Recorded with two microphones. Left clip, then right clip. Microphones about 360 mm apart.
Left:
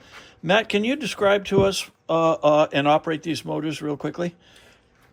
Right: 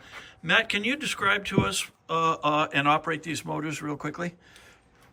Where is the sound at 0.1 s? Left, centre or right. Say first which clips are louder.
Left 3 dB; centre.